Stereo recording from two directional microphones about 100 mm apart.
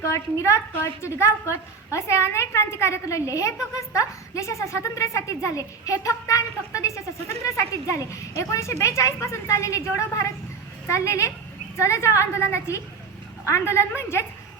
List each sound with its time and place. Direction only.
0.0 s a woman's voice: 30° left (ahead or behind)